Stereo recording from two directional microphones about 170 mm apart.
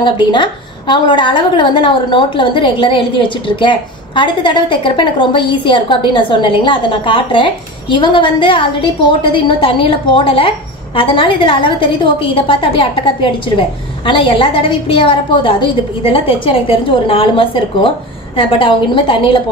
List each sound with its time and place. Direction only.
0.0 s a woman's voice: 30° left (ahead or behind)